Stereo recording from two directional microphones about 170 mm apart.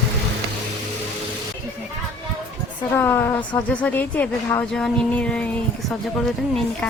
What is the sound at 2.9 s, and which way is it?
A woman's voice, 10° left (ahead or behind).